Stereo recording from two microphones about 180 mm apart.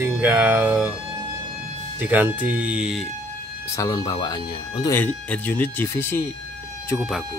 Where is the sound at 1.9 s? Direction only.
10° right (ahead or behind).